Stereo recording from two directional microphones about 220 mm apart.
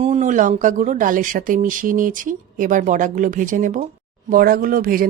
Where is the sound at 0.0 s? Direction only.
30° right (ahead or behind).